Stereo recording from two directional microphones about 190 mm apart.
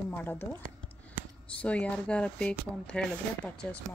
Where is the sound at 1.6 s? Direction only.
5° left (ahead or behind).